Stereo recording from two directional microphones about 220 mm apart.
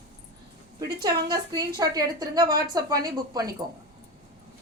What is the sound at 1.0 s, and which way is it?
A woman's voice, 15° right (ahead or behind).